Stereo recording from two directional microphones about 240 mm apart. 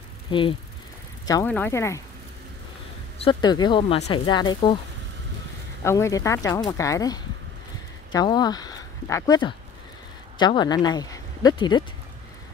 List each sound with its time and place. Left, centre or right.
0.3 s speech: left
3.3 s speech: centre
5.9 s speech: centre